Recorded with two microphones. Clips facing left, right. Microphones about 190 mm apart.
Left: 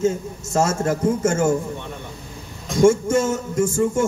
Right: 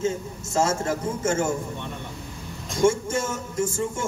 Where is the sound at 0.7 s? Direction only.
45° left (ahead or behind).